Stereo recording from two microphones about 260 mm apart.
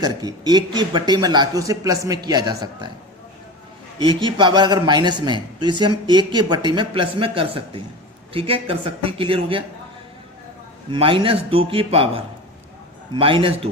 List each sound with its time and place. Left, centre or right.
0.0 s speech: centre
3.9 s a man's voice: centre
10.8 s a man's voice: centre